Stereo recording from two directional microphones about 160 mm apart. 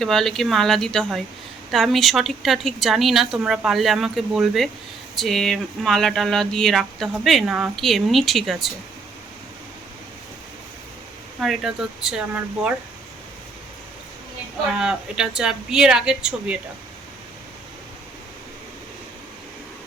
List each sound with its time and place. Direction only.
0.0 s speech: centre (ahead or behind)
11.3 s speech: centre (ahead or behind)
14.8 s speech: 5° right (ahead or behind)